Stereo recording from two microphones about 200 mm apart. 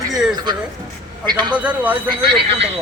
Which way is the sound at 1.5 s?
5° right (ahead or behind).